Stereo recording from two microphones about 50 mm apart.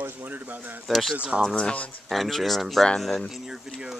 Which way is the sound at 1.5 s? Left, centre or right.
Left.